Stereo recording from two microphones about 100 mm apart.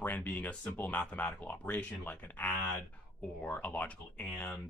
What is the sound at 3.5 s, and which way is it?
Speech, 15° left (ahead or behind).